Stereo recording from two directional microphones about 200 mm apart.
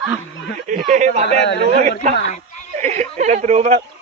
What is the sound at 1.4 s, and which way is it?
Speech, 60° left (ahead or behind).